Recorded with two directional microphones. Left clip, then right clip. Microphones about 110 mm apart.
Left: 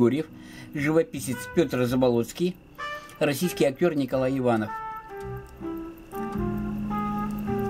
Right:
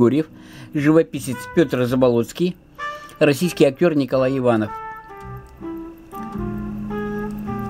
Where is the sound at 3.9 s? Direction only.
30° right (ahead or behind).